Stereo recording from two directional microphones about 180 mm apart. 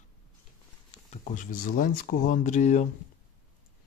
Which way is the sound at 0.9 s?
40° left (ahead or behind).